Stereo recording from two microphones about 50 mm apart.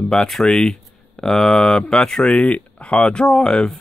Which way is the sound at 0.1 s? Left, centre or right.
Centre.